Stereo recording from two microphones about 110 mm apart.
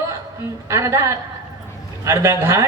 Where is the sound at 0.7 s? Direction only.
25° right (ahead or behind).